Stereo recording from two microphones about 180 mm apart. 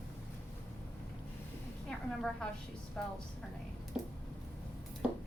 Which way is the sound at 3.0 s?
5° left (ahead or behind).